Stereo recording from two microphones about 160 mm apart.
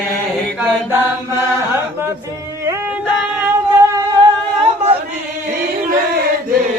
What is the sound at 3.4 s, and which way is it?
Singing, 20° right (ahead or behind).